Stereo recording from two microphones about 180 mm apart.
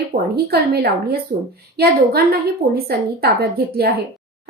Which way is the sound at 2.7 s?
60° right (ahead or behind).